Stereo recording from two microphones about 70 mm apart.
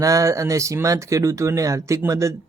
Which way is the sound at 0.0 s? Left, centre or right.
Right.